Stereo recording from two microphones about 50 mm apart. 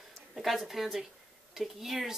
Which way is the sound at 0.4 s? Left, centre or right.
Centre.